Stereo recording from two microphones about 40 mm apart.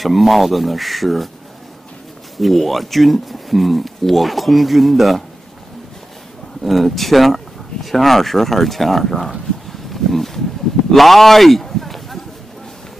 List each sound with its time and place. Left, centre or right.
0.0 s speech: centre
2.3 s speech: centre
6.6 s speech: centre
9.7 s a sound: centre